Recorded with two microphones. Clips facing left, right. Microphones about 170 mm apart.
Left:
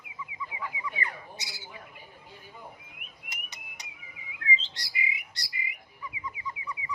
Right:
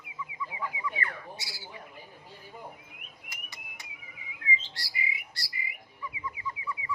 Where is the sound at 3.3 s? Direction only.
20° left (ahead or behind).